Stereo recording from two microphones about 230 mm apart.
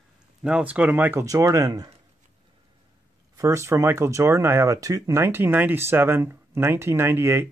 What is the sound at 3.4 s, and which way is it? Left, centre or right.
Speech, centre.